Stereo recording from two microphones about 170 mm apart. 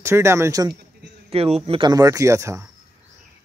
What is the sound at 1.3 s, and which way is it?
A man's voice, 35° right (ahead or behind).